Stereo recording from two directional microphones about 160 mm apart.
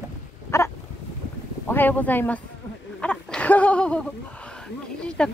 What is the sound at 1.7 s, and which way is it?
Speech, 10° left (ahead or behind).